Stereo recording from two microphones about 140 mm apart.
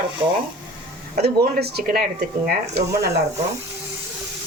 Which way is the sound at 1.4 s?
90° right.